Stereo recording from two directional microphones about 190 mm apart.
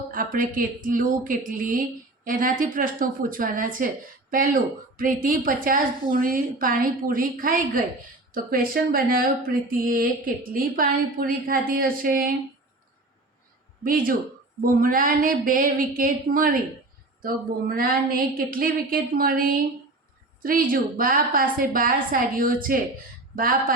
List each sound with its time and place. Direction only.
0.1 s a woman's voice: 45° right (ahead or behind)
13.8 s a woman's voice: 50° right (ahead or behind)